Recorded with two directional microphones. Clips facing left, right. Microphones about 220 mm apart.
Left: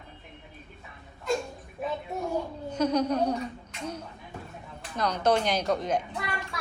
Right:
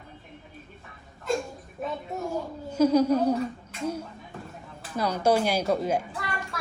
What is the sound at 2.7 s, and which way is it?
Speech, 5° right (ahead or behind).